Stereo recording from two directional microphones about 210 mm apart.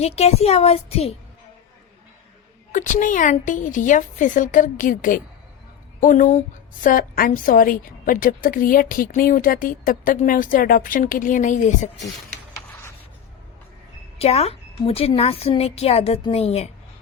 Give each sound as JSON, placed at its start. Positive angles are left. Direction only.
{"t": 0.0, "sound": "a woman's voice", "side_deg": 30}
{"t": 2.7, "sound": "a woman's voice", "side_deg": 40}
{"t": 14.2, "sound": "a woman's voice", "side_deg": 30}